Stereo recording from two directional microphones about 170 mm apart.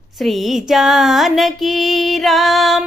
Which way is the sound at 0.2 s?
Centre (ahead or behind).